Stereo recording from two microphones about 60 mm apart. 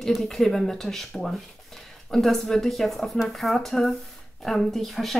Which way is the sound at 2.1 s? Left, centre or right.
Centre.